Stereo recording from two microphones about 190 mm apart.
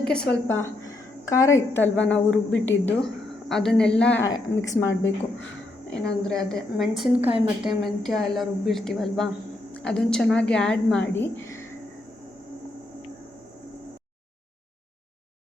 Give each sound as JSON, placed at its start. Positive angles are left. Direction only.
{"t": 0.0, "sound": "a woman's voice", "side_deg": 5}
{"t": 4.3, "sound": "a woman's voice", "side_deg": 15}
{"t": 5.9, "sound": "a woman's voice", "side_deg": 5}
{"t": 7.2, "sound": "a woman's voice", "side_deg": -30}
{"t": 7.6, "sound": "a woman's voice", "side_deg": 0}